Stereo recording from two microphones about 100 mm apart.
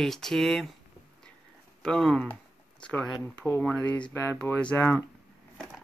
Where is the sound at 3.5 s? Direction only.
20° left (ahead or behind).